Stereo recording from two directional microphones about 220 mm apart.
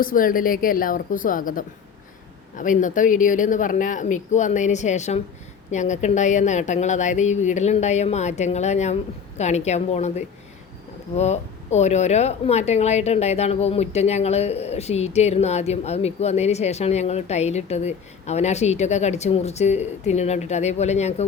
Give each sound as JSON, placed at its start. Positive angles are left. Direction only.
{"t": 0.0, "sound": "a woman's voice", "side_deg": 40}